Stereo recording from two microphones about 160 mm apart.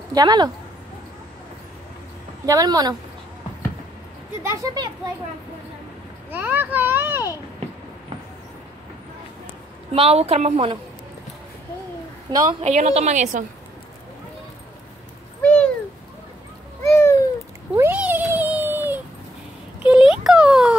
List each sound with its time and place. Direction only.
0.1 s speech: 25° right (ahead or behind)
2.4 s speech: 25° right (ahead or behind)
4.4 s a child's voice: 15° right (ahead or behind)
6.3 s a child's voice: 10° right (ahead or behind)
9.9 s a woman's voice: 40° right (ahead or behind)
12.3 s speech: 25° right (ahead or behind)
12.6 s a woman's voice: 45° right (ahead or behind)
15.4 s a sound: 10° left (ahead or behind)
16.8 s a sound: 15° left (ahead or behind)
17.7 s cat: 10° right (ahead or behind)
19.8 s a sound: 5° right (ahead or behind)